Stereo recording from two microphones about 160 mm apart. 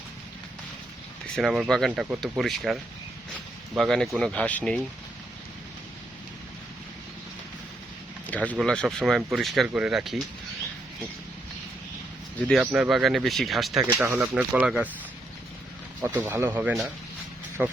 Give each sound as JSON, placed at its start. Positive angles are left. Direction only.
{"t": 1.4, "sound": "speech", "side_deg": 0}
{"t": 1.9, "sound": "speech", "side_deg": -10}
{"t": 2.2, "sound": "speech", "side_deg": 0}
{"t": 3.8, "sound": "speech", "side_deg": 0}
{"t": 8.3, "sound": "speech", "side_deg": 10}
{"t": 12.4, "sound": "speech", "side_deg": 0}
{"t": 14.0, "sound": "speech", "side_deg": -15}
{"t": 16.0, "sound": "speech", "side_deg": -15}